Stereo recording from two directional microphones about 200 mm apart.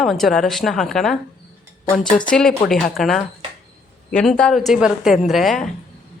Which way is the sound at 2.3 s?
5° left (ahead or behind).